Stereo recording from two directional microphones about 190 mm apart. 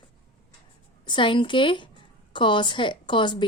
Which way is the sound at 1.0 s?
25° left (ahead or behind).